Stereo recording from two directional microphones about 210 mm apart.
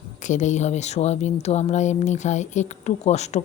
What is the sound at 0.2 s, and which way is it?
Speech, 35° left (ahead or behind).